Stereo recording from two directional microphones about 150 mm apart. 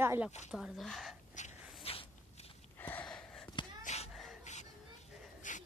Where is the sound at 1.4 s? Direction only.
55° left (ahead or behind).